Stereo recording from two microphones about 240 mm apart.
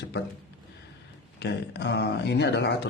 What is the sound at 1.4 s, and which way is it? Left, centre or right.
A man's voice, left.